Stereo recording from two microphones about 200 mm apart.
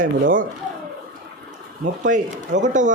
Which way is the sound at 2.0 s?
40° right (ahead or behind).